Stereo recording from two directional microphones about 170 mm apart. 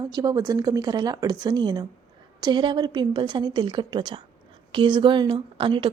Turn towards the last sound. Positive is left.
turn(degrees=-30)  # may be behind; listen again after turning